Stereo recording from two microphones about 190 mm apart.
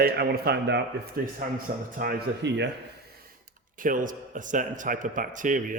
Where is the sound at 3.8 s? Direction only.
45° right (ahead or behind).